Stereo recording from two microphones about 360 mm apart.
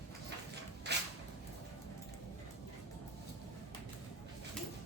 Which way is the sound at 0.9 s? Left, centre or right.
Right.